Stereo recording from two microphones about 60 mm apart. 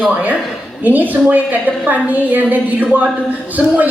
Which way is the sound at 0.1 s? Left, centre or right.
Right.